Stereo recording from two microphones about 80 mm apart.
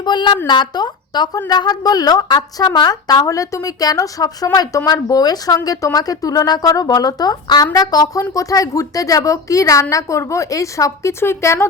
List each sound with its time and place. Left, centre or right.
0.0 s a woman's voice: left